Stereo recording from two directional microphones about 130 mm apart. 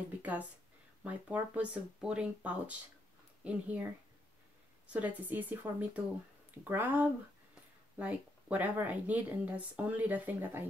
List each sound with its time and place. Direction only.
0.2 s speech: 10° right (ahead or behind)